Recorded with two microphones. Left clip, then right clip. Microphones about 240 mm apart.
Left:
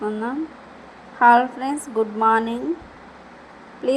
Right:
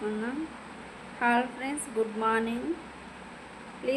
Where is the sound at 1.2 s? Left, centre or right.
Left.